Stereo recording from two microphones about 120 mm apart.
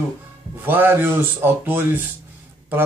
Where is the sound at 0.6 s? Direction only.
15° right (ahead or behind).